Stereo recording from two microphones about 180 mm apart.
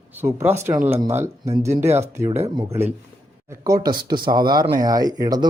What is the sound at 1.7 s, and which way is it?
Speech, 40° right (ahead or behind).